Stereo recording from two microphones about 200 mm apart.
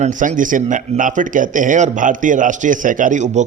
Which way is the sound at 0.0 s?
40° right (ahead or behind).